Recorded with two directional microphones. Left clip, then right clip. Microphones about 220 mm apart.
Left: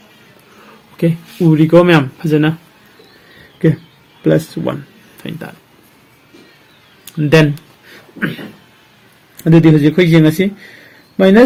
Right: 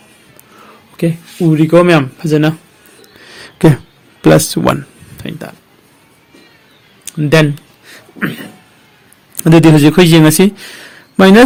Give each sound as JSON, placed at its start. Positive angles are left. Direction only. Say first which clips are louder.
{"t": 0.9, "sound": "speech", "louder": "even", "side_deg": -15}
{"t": 4.2, "sound": "speech", "louder": "right 6 dB", "side_deg": -40}
{"t": 5.1, "sound": "speech", "louder": "right 2 dB", "side_deg": -20}
{"t": 7.2, "sound": "speech", "louder": "right 1 dB", "side_deg": -20}
{"t": 9.4, "sound": "a man's voice", "louder": "right 3 dB", "side_deg": -45}